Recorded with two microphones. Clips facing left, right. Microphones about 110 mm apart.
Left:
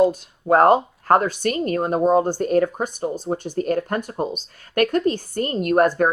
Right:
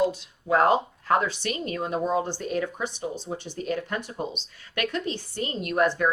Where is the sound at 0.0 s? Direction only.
50° left (ahead or behind).